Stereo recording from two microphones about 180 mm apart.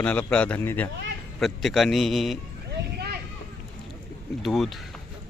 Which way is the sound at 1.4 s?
Centre (ahead or behind).